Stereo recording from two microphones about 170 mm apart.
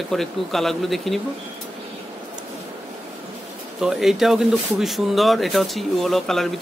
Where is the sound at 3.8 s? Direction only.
Centre (ahead or behind).